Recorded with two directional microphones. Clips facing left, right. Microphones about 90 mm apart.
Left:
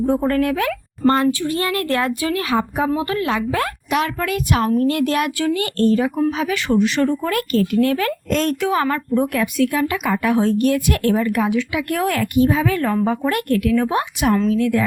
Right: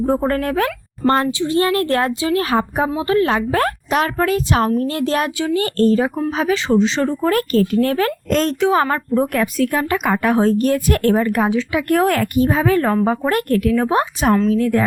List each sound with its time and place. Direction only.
0.0 s a woman's voice: 35° right (ahead or behind)
1.3 s speech: 20° right (ahead or behind)
1.5 s a woman's voice: 30° right (ahead or behind)
6.5 s speech: 25° right (ahead or behind)
7.3 s a woman's voice: 40° right (ahead or behind)